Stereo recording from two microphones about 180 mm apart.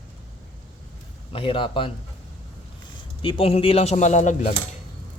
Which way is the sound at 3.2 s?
30° left (ahead or behind).